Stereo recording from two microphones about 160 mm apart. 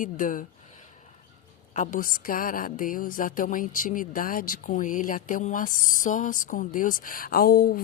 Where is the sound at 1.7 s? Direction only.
55° left (ahead or behind).